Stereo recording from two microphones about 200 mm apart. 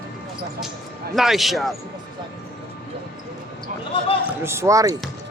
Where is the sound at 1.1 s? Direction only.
Centre (ahead or behind).